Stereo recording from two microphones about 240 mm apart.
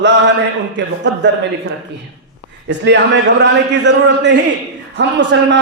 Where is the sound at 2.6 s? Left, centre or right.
Right.